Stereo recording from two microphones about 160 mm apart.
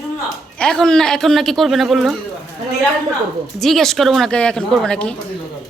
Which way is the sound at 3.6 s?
Centre (ahead or behind).